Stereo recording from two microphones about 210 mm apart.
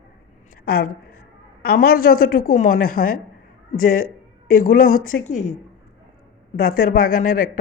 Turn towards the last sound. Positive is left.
turn(degrees=40)  # may be behind; listen again after turning